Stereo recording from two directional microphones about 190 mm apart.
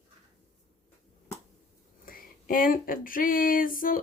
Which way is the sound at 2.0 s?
50° left (ahead or behind).